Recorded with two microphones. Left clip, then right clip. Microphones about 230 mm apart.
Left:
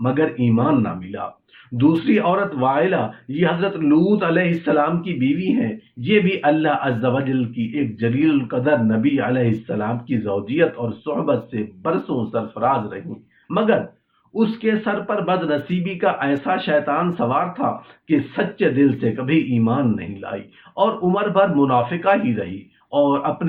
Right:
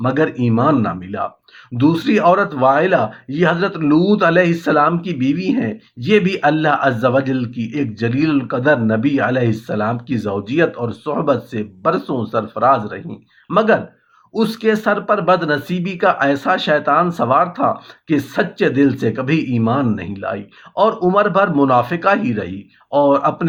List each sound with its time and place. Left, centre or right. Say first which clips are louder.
0.0 s speech: right 3 dB; right